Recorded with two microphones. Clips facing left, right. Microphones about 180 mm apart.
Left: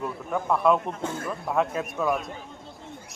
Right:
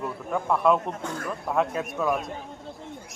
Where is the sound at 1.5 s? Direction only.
Centre (ahead or behind).